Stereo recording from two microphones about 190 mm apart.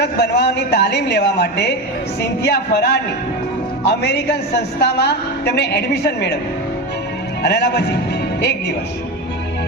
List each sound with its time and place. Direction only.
0.0 s a woman's voice: 60° left (ahead or behind)
7.4 s a woman's voice: 65° left (ahead or behind)